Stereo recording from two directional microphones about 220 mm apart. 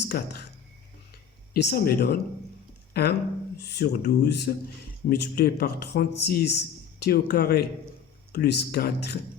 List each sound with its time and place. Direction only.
0.0 s speech: 50° left (ahead or behind)
1.1 s a sound: 45° left (ahead or behind)
2.9 s speech: 45° left (ahead or behind)